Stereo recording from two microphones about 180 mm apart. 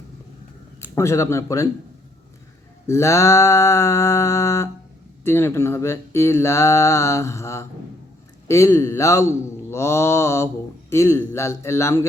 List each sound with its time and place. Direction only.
0.9 s speech: 15° left (ahead or behind)
2.8 s speech: 15° left (ahead or behind)